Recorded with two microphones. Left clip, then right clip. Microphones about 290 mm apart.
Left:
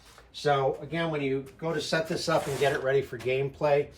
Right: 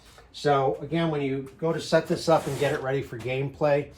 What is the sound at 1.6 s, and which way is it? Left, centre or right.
Speech, centre.